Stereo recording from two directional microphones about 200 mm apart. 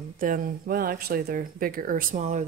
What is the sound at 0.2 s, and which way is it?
Speech, 45° right (ahead or behind).